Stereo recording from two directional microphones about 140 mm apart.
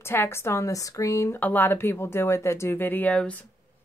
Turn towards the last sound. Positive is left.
turn(degrees=10)  # may be behind; listen again after turning